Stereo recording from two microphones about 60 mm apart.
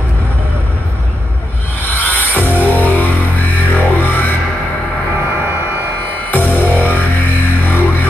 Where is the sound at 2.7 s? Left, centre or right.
Left.